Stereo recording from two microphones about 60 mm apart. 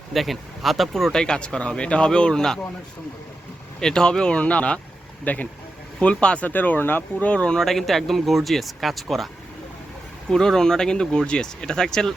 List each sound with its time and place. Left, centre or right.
0.1 s speech: centre
3.8 s speech: centre
6.5 s speech: left
7.3 s speech: centre
7.6 s speech: centre